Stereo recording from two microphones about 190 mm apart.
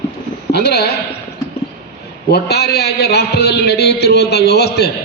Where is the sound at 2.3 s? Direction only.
60° left (ahead or behind).